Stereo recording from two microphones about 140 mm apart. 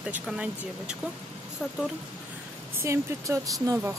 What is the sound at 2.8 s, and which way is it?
Speech, 20° right (ahead or behind).